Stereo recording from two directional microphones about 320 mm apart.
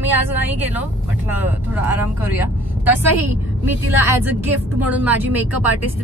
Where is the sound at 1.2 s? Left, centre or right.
Centre.